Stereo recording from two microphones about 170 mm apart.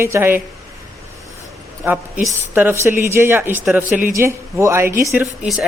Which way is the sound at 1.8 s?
10° right (ahead or behind).